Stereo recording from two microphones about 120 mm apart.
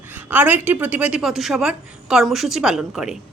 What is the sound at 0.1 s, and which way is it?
A woman's voice, 15° right (ahead or behind).